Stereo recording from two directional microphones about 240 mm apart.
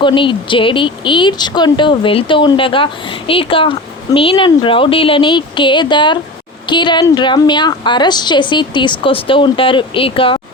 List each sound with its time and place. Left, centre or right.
0.0 s speech: centre